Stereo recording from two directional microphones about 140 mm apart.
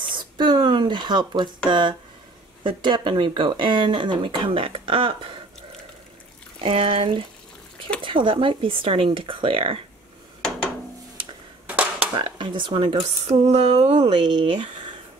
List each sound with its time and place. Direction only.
0.0 s speech: 35° right (ahead or behind)
11.6 s a sound: 10° right (ahead or behind)
12.1 s speech: 35° right (ahead or behind)
13.3 s speech: 50° right (ahead or behind)